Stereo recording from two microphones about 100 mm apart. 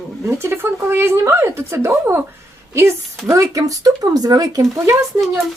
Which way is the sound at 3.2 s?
30° right (ahead or behind).